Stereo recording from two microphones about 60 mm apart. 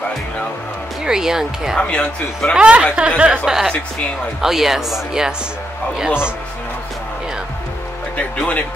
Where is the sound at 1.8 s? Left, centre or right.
Centre.